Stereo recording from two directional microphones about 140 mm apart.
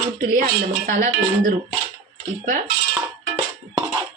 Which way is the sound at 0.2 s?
70° right (ahead or behind).